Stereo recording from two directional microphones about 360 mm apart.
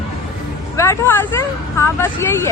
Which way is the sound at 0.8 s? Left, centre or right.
Centre.